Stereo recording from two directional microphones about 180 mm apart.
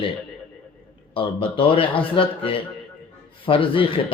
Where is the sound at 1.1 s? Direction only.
30° left (ahead or behind).